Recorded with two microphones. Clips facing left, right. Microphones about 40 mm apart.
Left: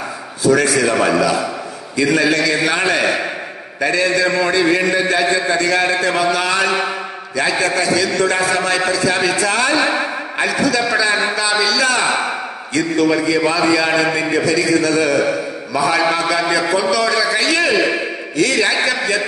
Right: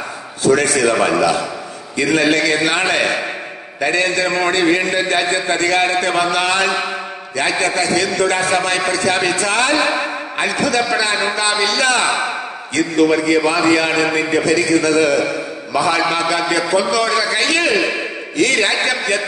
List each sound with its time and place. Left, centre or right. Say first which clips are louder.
0.4 s a man's voice: even; right